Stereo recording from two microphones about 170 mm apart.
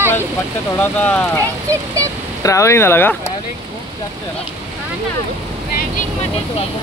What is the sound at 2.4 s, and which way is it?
Speech, 15° left (ahead or behind).